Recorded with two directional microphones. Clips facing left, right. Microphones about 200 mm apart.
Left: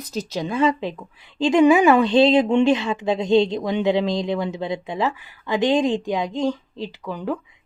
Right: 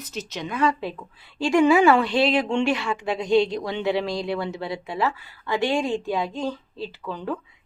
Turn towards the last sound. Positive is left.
turn(degrees=15)  # may be behind; listen again after turning